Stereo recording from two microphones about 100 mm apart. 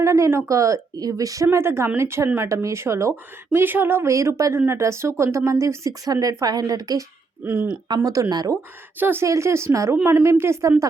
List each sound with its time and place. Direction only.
0.0 s speech: 30° right (ahead or behind)
7.4 s speech: 20° right (ahead or behind)
8.0 s speech: 35° right (ahead or behind)
9.0 s speech: 20° right (ahead or behind)